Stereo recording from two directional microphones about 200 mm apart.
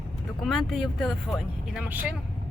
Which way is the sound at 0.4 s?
Centre (ahead or behind).